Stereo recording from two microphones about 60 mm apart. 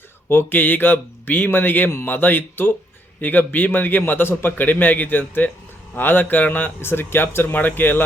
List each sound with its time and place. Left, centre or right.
0.3 s a man's voice: left